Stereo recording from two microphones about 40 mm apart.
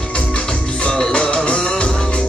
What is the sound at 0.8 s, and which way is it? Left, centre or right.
Music, left.